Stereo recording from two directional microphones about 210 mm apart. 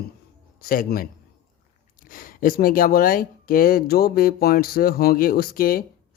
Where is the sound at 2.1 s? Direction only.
40° left (ahead or behind).